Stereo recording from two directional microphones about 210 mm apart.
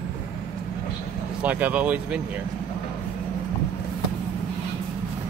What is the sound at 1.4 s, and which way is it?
Speech, 5° right (ahead or behind).